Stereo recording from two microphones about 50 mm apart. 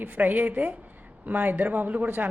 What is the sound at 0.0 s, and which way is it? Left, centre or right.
Speech, right.